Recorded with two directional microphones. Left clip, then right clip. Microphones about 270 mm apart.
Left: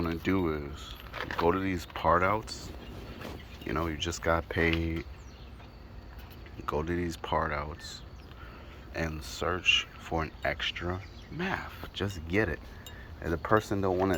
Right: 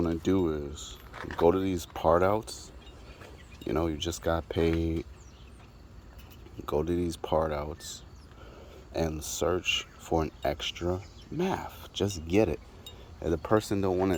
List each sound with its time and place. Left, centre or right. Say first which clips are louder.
0.0 s speech: right 3 dB; right
1.1 s speech: left 4 dB; left
1.5 s speech: right 5 dB; right
3.7 s speech: right 2 dB; right
6.7 s speech: right 3 dB; right
8.9 s speech: right 4 dB; right